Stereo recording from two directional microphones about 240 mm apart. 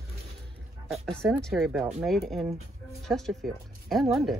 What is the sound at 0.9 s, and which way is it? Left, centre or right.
A woman's voice, centre.